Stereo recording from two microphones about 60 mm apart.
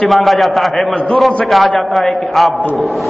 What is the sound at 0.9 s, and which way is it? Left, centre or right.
Speech, centre.